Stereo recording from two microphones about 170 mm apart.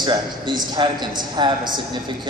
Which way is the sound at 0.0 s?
25° right (ahead or behind).